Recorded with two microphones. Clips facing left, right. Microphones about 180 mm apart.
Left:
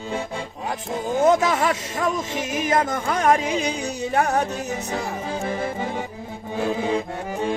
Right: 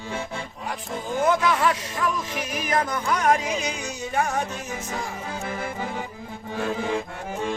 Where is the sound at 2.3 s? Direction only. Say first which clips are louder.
Left 4 dB; 25° left (ahead or behind).